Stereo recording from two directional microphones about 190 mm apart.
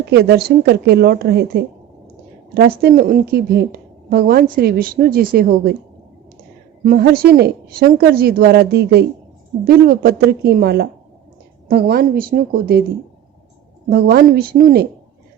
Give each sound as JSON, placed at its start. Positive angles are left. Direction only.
{"t": 0.1, "sound": "a woman's voice", "side_deg": -60}
{"t": 6.8, "sound": "a woman's voice", "side_deg": -55}
{"t": 13.9, "sound": "speech", "side_deg": -50}